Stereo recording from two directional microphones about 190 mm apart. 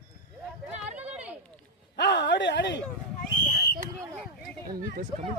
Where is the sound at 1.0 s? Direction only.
5° right (ahead or behind).